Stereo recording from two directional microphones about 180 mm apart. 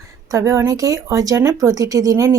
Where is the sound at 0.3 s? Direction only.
15° right (ahead or behind).